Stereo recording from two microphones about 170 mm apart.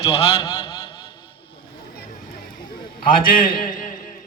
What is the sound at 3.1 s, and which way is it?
Speech, 55° left (ahead or behind).